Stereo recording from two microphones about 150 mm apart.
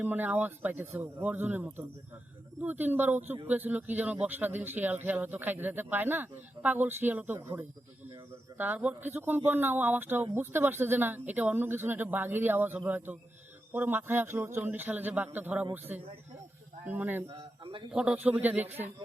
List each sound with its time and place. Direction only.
0.0 s speech: 10° right (ahead or behind)
16.8 s speech: 10° right (ahead or behind)
17.2 s a man's voice: 35° right (ahead or behind)
17.9 s speech: 5° right (ahead or behind)